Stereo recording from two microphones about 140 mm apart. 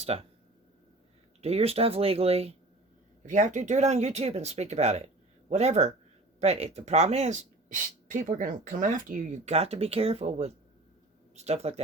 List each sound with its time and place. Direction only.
0.0 s speech: 45° right (ahead or behind)
1.4 s speech: 50° right (ahead or behind)
3.2 s speech: 65° right (ahead or behind)